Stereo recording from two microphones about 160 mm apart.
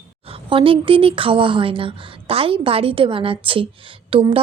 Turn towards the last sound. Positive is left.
turn(degrees=-35)  # may be behind; listen again after turning